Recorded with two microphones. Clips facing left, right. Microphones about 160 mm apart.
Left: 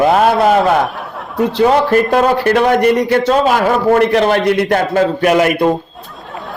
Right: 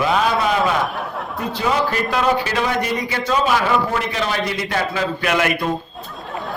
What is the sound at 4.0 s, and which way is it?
A woman's voice, 65° left (ahead or behind).